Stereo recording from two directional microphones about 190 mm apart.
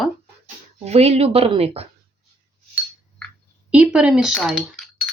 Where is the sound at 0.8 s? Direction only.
35° right (ahead or behind).